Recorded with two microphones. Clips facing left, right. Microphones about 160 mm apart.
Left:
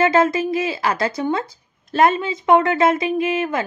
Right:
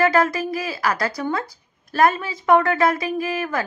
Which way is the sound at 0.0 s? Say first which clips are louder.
Left 2 dB; 20° left (ahead or behind).